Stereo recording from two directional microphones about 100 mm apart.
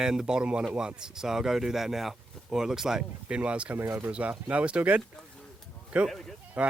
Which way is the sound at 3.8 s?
25° right (ahead or behind).